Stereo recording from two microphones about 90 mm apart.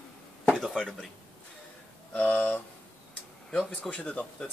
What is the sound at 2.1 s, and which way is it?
Speech, 20° left (ahead or behind).